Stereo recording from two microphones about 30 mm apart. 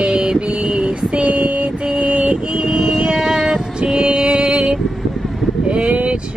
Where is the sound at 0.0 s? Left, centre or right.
Right.